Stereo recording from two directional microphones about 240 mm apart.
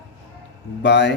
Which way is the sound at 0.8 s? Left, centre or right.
Left.